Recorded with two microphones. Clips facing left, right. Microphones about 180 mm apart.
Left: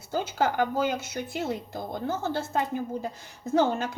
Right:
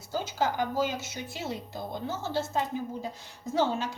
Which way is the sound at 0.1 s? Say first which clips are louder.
Left 3 dB; 60° left (ahead or behind).